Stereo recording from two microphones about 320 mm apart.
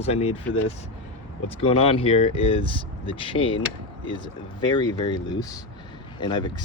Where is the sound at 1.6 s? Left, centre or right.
Centre.